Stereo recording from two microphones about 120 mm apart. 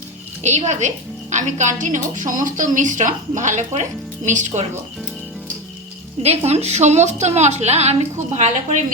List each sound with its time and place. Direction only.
0.4 s a woman's voice: 70° right (ahead or behind)
6.2 s a woman's voice: 60° right (ahead or behind)